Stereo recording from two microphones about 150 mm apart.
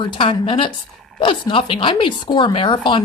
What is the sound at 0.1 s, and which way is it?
Speech, 35° left (ahead or behind).